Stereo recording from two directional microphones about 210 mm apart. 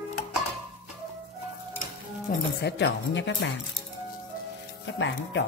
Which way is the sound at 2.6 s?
55° left (ahead or behind).